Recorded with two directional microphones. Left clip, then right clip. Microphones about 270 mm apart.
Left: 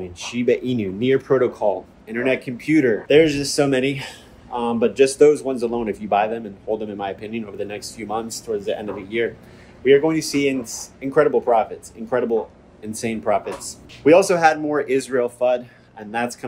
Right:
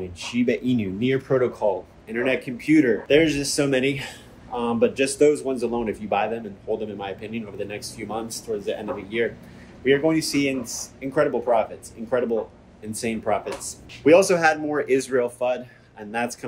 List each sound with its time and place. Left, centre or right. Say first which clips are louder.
0.0 s speech: left 2 dB; centre